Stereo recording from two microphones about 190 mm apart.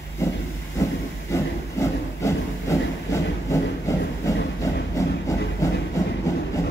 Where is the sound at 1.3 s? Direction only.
15° left (ahead or behind).